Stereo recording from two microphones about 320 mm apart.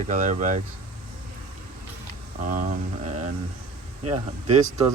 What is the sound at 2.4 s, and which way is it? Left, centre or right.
Speech, right.